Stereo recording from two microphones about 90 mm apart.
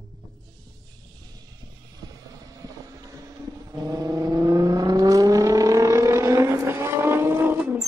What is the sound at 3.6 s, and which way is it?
Vehicle, 45° right (ahead or behind).